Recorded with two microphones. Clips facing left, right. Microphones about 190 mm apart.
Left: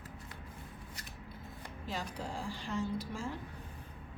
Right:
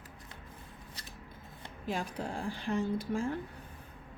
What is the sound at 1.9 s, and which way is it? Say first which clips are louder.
A woman's voice: right 4 dB; 55° right (ahead or behind).